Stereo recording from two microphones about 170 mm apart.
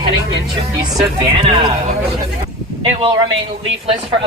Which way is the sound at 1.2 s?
30° right (ahead or behind).